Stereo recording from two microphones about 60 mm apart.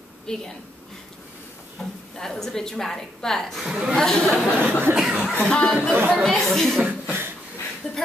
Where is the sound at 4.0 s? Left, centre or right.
Centre.